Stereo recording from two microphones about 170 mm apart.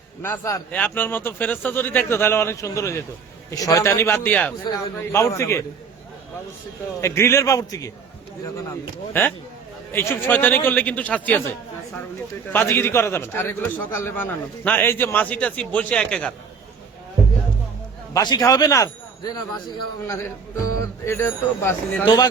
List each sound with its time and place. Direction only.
0.2 s a man's voice: 15° left (ahead or behind)
7.0 s a man's voice: 15° left (ahead or behind)
9.2 s a man's voice: 15° left (ahead or behind)
12.5 s a man's voice: 10° left (ahead or behind)
18.1 s speech: 20° left (ahead or behind)
22.0 s speech: 25° left (ahead or behind)